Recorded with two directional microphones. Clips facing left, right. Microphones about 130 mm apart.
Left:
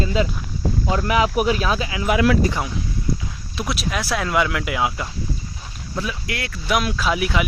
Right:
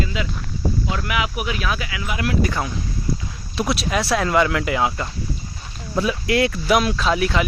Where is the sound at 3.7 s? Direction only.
Centre (ahead or behind).